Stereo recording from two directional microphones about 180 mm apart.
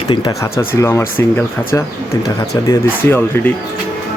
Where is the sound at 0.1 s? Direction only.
25° left (ahead or behind).